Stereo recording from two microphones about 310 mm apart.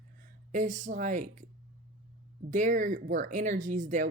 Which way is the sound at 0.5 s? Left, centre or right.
Right.